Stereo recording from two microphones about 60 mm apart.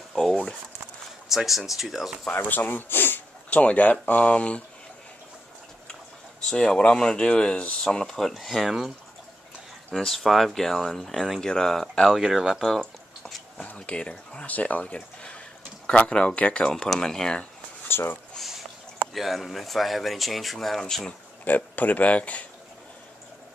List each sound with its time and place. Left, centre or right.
0.1 s a sound: centre
1.3 s speech: centre
2.3 s speech: left
3.4 s speech: left
6.4 s speech: centre
9.9 s speech: centre
12.2 s speech: centre
13.6 s speech: left
16.6 s speech: centre
17.8 s a sound: left
18.4 s a sound: centre
19.1 s speech: centre
21.5 s speech: left